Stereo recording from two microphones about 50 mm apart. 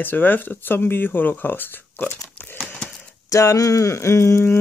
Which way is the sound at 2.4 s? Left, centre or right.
Left.